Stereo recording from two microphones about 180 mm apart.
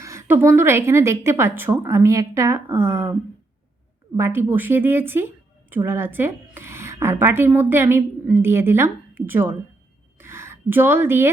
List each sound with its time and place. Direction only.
0.0 s a woman's voice: 15° right (ahead or behind)
4.2 s a woman's voice: 15° right (ahead or behind)
10.2 s a sound: 15° right (ahead or behind)